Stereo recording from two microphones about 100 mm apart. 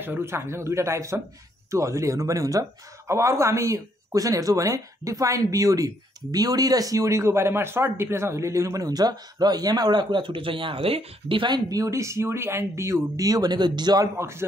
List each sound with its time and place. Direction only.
0.0 s speech: 25° right (ahead or behind); by 11.6 s 55° right (ahead or behind)
11.7 s speech: 30° right (ahead or behind)
14.1 s speech: 25° right (ahead or behind)